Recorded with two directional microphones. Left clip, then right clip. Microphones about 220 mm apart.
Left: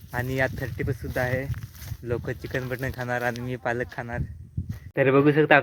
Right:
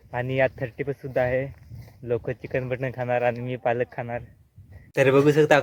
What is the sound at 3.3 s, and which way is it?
Speech, 35° left (ahead or behind).